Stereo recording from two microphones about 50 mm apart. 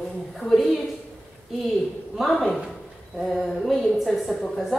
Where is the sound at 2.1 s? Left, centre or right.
Centre.